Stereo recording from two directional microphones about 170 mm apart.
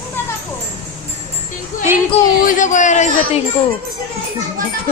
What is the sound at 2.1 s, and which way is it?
Speech, 35° left (ahead or behind).